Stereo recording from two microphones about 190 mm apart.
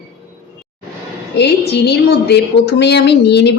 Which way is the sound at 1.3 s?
60° left (ahead or behind).